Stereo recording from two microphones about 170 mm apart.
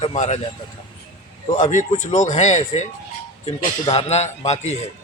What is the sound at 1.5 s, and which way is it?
A man's voice, 45° left (ahead or behind).